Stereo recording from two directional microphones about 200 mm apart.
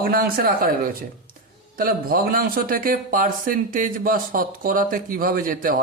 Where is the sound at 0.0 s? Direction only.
50° right (ahead or behind).